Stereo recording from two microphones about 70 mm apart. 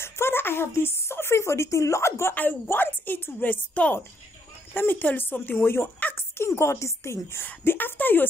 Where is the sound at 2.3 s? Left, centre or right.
Left.